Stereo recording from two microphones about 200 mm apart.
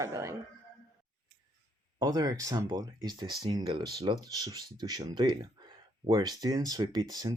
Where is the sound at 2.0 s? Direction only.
20° right (ahead or behind).